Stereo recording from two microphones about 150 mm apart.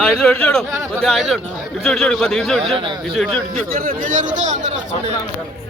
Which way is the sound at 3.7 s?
65° right (ahead or behind).